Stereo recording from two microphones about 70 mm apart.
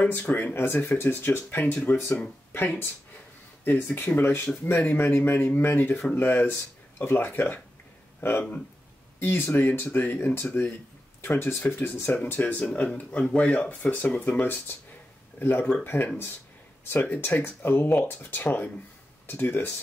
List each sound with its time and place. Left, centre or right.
0.0 s speech: left
3.6 s speech: left